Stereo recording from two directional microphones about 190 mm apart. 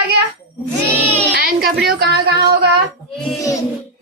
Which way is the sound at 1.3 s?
55° right (ahead or behind).